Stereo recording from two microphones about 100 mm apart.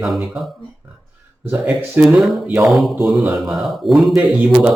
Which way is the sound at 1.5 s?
5° right (ahead or behind).